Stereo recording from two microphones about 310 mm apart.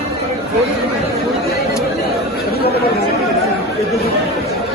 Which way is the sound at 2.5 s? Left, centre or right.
Left.